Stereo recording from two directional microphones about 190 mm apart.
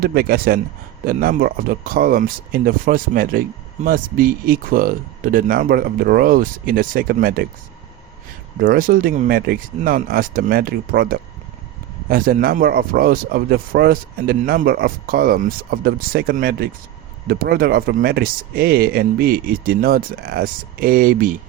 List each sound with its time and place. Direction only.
0.0 s speech: 55° right (ahead or behind)
8.5 s speech: 50° right (ahead or behind)